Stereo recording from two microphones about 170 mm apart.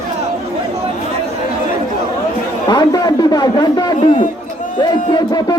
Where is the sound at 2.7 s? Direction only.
25° left (ahead or behind).